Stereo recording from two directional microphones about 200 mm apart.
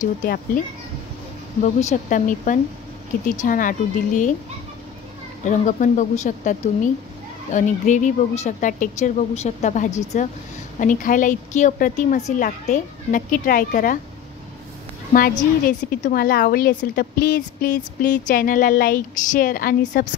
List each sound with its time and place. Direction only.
0.0 s a woman's voice: 40° left (ahead or behind)
1.6 s a woman's voice: 35° left (ahead or behind)
5.4 s a woman's voice: 35° left (ahead or behind)
15.9 s a woman's voice: 45° left (ahead or behind)